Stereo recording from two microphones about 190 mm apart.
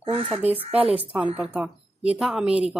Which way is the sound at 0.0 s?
25° right (ahead or behind).